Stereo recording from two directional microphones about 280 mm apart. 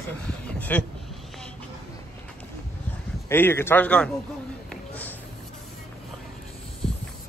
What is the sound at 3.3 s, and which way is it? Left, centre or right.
Speech, centre.